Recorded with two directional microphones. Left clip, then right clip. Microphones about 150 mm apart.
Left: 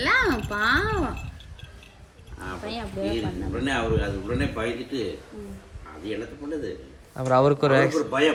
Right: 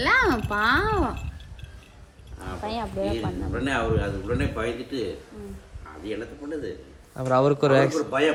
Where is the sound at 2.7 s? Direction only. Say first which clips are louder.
Right 3 dB; 40° right (ahead or behind).